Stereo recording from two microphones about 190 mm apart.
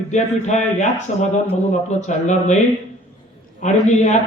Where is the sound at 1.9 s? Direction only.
40° left (ahead or behind).